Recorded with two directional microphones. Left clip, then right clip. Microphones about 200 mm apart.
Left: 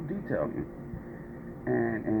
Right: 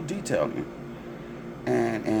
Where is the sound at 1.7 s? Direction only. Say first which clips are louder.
Right 4 dB; 25° right (ahead or behind).